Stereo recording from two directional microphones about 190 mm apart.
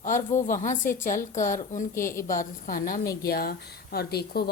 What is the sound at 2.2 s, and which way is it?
Speech, 45° left (ahead or behind).